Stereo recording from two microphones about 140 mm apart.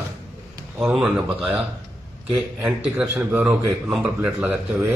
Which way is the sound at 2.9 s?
15° right (ahead or behind).